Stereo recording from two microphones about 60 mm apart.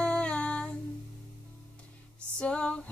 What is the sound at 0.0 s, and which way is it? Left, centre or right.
Humming, centre.